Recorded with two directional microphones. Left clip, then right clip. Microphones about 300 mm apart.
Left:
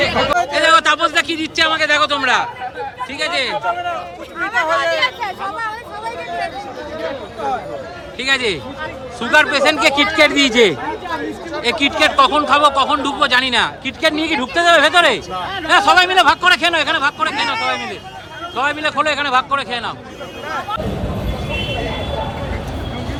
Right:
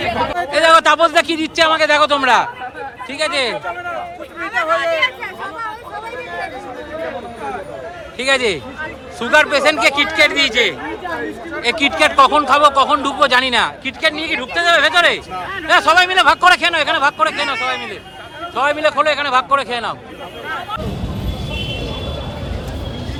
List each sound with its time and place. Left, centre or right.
0.5 s speech: centre
4.4 s speech: left
8.2 s speech: centre
11.6 s speech: centre
21.7 s vehicle: centre